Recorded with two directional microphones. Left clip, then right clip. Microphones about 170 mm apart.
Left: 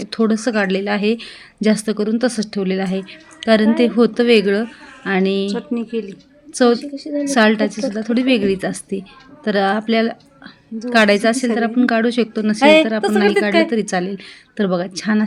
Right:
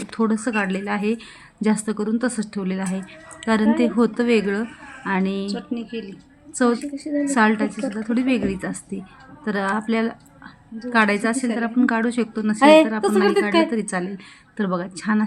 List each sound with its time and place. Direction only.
0.0 s a woman's voice: 20° left (ahead or behind)
5.5 s speech: 40° left (ahead or behind)
6.6 s a woman's voice: 15° left (ahead or behind)
12.6 s speech: 35° left (ahead or behind)
13.7 s a woman's voice: 15° left (ahead or behind)